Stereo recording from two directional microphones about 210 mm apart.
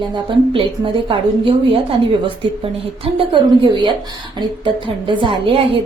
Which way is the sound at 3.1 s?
25° right (ahead or behind).